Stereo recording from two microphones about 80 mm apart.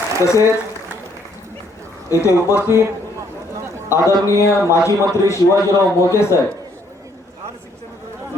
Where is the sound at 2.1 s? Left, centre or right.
Left.